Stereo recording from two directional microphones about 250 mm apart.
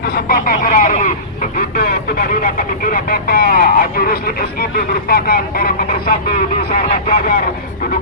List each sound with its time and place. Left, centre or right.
0.0 s speech: left